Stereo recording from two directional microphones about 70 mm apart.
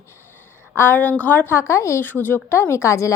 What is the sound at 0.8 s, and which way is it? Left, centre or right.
Speech, left.